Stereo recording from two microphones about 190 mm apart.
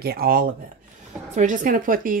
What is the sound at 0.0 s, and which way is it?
Speech, 55° right (ahead or behind).